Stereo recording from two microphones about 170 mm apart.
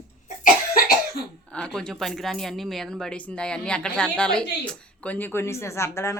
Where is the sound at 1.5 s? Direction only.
5° left (ahead or behind).